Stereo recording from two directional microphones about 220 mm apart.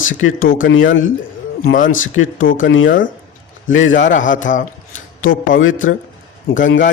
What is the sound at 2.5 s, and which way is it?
Speech, 60° left (ahead or behind).